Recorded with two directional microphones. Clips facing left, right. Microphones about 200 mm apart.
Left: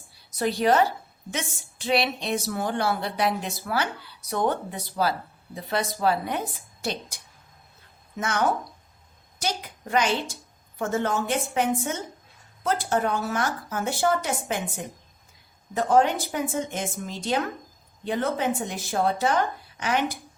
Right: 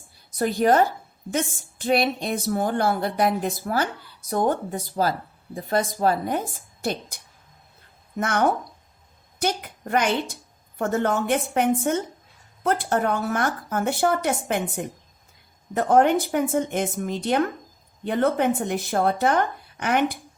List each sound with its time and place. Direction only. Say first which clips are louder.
0.3 s a woman's voice: right 2 dB; 45° right (ahead or behind)
8.2 s a woman's voice: right 3 dB; 55° right (ahead or behind)